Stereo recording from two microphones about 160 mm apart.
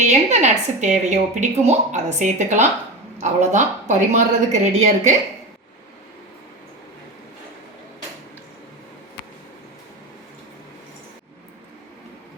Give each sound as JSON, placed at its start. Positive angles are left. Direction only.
{"t": 0.0, "sound": "speech", "side_deg": -45}